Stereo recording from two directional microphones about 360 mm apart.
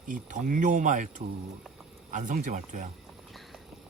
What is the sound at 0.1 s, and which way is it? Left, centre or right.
Speech, right.